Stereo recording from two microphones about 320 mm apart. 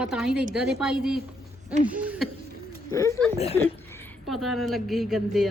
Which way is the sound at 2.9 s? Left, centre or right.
Centre.